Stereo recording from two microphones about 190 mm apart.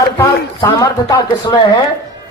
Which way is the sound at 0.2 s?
15° left (ahead or behind).